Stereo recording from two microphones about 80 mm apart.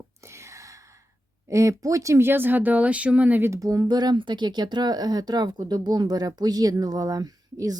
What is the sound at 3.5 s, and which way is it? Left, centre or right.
Speech, right.